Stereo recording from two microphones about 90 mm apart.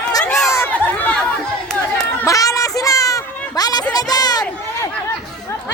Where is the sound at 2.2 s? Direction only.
40° left (ahead or behind).